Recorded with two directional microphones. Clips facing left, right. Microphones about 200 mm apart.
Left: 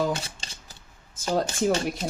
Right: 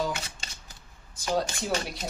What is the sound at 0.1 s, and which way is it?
Shuffling cards, 35° left (ahead or behind).